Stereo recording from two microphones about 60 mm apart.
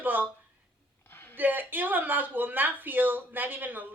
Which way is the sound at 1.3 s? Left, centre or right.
Right.